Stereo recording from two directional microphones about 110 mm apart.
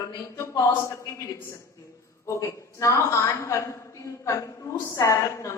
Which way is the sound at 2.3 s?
30° left (ahead or behind).